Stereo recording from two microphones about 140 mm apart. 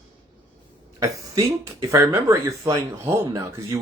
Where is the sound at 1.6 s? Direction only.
20° right (ahead or behind).